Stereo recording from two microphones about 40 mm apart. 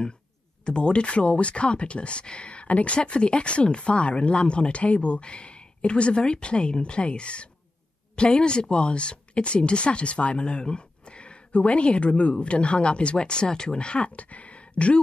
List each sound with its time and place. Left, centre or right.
0.7 s speech: left